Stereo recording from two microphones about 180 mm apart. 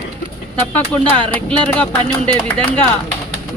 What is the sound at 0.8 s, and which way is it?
Speech, 10° left (ahead or behind).